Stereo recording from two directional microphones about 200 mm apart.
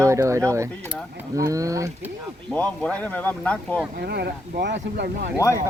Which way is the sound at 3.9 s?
55° right (ahead or behind).